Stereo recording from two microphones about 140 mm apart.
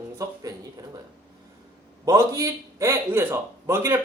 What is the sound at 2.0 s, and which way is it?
A man's voice, 25° right (ahead or behind).